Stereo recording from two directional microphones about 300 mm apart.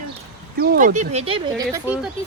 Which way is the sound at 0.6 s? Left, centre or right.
Right.